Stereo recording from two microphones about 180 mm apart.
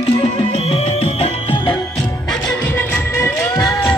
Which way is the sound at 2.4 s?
10° left (ahead or behind).